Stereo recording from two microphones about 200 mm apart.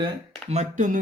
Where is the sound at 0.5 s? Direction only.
40° right (ahead or behind).